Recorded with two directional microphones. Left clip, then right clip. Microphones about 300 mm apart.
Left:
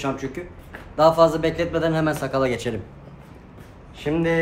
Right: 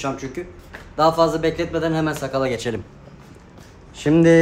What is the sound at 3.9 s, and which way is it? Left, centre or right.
Speech, right.